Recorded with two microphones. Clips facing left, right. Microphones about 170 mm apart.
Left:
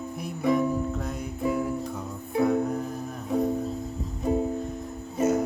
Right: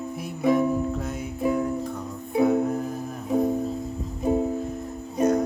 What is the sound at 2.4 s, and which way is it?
Music, 5° right (ahead or behind).